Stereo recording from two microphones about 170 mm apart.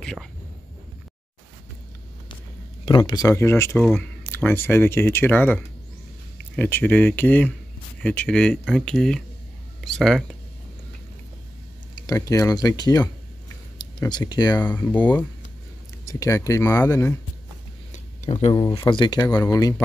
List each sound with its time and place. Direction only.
0.0 s whispering: centre (ahead or behind)
2.8 s speech: 30° left (ahead or behind); by 10.2 s centre (ahead or behind)
12.1 s speech: 20° left (ahead or behind)
14.6 s speech: 10° left (ahead or behind)
17.9 s a sound: 40° left (ahead or behind)
18.5 s speech: 25° left (ahead or behind)